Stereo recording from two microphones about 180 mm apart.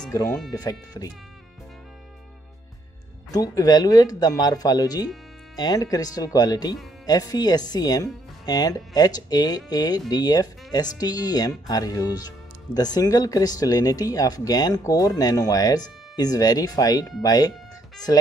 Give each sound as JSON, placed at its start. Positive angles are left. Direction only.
{"t": 0.1, "sound": "speech", "side_deg": 15}
{"t": 3.3, "sound": "speech", "side_deg": 20}